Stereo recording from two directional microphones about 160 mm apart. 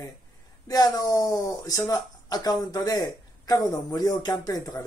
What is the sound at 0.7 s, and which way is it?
Speech, 25° left (ahead or behind).